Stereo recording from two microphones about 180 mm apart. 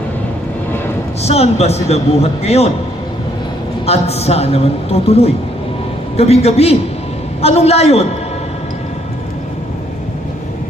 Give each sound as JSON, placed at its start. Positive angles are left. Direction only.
{"t": 1.2, "sound": "a man's voice", "side_deg": 35}
{"t": 3.8, "sound": "a man's voice", "side_deg": 35}